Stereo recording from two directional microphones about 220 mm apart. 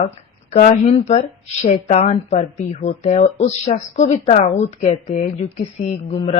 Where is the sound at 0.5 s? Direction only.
35° left (ahead or behind).